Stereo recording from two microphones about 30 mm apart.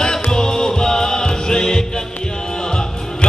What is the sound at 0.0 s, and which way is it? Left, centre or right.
Music, centre.